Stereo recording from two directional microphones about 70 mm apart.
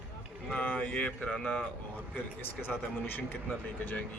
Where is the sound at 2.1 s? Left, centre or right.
Left.